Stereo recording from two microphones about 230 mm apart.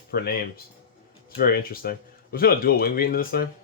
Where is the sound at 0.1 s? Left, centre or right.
Left.